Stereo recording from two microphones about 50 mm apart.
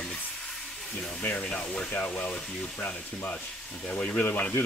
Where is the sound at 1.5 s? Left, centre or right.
Centre.